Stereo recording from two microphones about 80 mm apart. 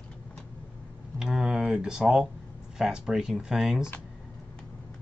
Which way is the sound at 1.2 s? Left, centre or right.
Centre.